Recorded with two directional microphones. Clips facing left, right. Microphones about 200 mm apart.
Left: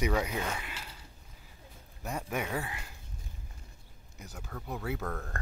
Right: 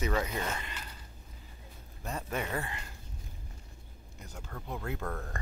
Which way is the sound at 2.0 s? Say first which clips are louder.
Left 1 dB; 10° left (ahead or behind).